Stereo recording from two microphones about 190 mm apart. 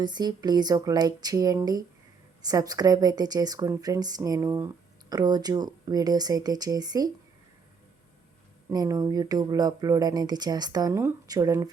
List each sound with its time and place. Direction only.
0.0 s a woman's voice: 20° right (ahead or behind)
8.7 s a woman's voice: 20° right (ahead or behind)